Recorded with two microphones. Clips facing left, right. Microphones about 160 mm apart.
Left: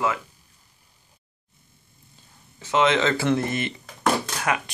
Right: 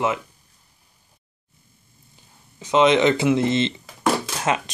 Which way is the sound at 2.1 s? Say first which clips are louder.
Even; 20° right (ahead or behind).